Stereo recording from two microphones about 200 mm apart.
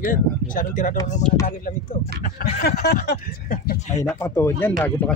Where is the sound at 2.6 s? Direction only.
50° left (ahead or behind).